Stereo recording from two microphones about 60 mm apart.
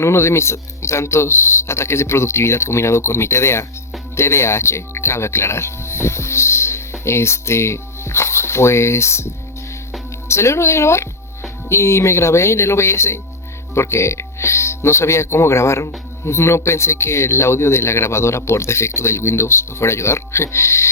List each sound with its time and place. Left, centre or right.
0.0 s speech: left